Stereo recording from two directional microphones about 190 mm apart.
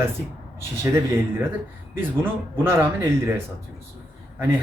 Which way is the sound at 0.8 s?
15° right (ahead or behind).